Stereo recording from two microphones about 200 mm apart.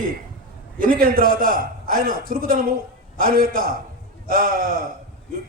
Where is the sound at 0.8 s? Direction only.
45° right (ahead or behind).